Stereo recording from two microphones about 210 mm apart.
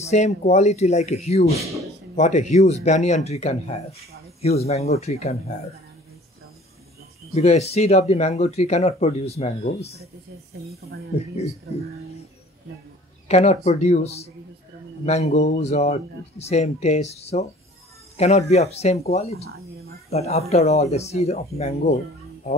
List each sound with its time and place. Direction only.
0.0 s speech: 30° left (ahead or behind)
7.3 s speech: 30° left (ahead or behind)
13.3 s speech: 30° left (ahead or behind)
18.1 s music: 30° left (ahead or behind)
18.5 s speech: 30° left (ahead or behind)